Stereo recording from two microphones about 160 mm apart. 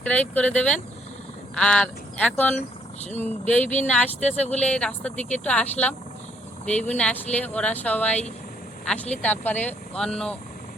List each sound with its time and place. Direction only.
0.0 s speech: 10° left (ahead or behind)
2.6 s speech: 45° left (ahead or behind)
3.2 s speech: 10° left (ahead or behind)
4.2 s speech: 45° left (ahead or behind)
4.6 s speech: 5° left (ahead or behind)